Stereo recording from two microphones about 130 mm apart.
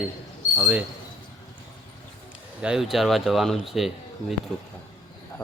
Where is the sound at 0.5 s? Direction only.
15° right (ahead or behind).